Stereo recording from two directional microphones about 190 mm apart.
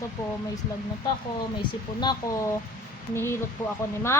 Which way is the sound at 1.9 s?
20° left (ahead or behind).